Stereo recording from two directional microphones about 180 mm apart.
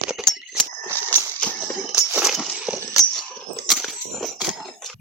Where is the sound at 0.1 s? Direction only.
5° right (ahead or behind).